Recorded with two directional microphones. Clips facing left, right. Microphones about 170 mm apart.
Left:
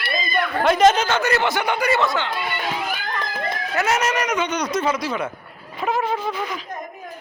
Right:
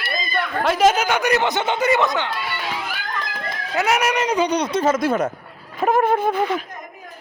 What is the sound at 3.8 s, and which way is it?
Speech, 15° right (ahead or behind).